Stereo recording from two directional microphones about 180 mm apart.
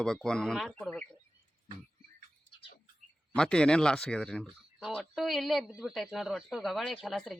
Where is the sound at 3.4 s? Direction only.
5° left (ahead or behind).